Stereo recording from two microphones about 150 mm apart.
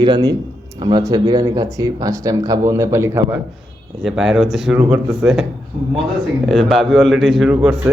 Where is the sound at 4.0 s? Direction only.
5° right (ahead or behind).